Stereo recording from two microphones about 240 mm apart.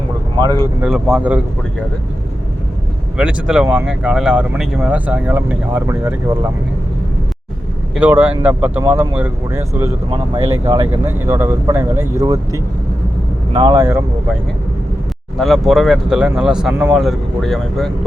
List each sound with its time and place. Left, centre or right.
0.8 s speech: centre
3.2 s speech: centre
7.9 s speech: centre
13.7 s speech: centre
15.4 s speech: centre